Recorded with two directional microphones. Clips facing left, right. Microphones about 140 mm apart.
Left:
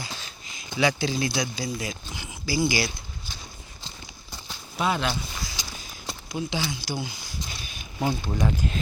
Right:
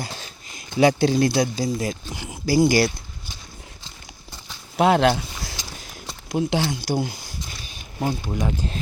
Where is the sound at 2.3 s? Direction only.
55° right (ahead or behind).